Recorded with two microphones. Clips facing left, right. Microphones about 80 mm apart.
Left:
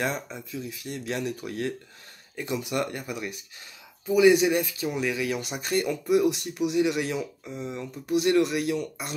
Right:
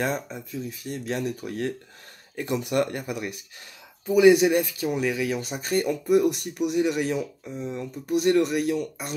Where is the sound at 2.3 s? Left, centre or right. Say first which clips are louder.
Right 4 dB; right.